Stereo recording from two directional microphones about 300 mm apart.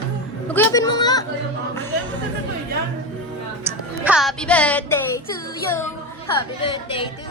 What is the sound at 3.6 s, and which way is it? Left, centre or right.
Music, centre.